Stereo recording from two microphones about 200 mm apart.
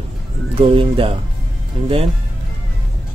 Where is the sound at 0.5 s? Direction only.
25° right (ahead or behind).